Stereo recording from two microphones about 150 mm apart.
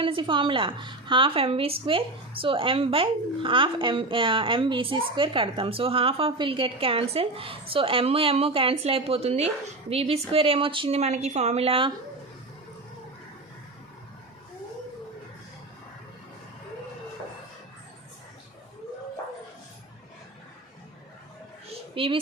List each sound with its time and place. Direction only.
0.0 s a woman's voice: 35° right (ahead or behind)
21.9 s a child's voice: 35° right (ahead or behind)